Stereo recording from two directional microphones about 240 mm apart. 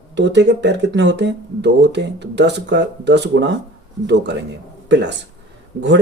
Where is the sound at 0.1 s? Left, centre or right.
Right.